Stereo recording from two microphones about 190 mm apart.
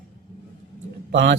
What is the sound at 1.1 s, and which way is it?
Speech, 65° right (ahead or behind).